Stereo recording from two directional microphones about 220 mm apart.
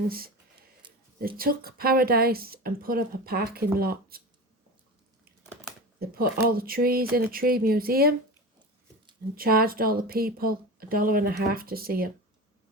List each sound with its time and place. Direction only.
0.8 s a sound: 20° right (ahead or behind)
1.4 s speech: 40° right (ahead or behind)
6.0 s speech: 45° right (ahead or behind)
9.3 s speech: 40° right (ahead or behind)